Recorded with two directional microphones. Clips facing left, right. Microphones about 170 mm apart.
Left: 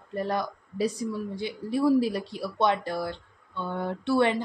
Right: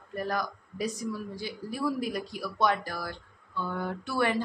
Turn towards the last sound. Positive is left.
turn(degrees=25)  # may be behind; listen again after turning